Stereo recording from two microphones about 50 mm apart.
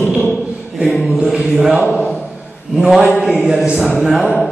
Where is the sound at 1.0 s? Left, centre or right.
Centre.